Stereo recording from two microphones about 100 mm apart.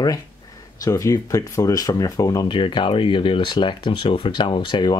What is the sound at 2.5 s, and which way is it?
Speech, 55° left (ahead or behind).